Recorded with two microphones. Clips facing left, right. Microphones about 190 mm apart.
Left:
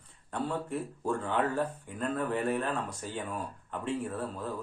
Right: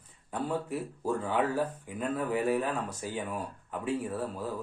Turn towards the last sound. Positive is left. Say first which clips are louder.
# right 1 dB
turn(degrees=-5)  # may be behind; listen again after turning